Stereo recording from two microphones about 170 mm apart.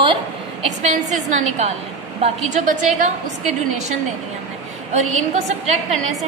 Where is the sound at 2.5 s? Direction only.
45° right (ahead or behind).